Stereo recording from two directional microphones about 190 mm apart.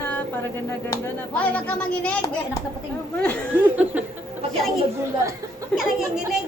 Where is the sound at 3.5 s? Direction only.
10° right (ahead or behind).